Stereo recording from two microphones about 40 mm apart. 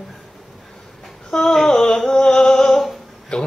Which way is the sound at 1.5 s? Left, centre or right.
Centre.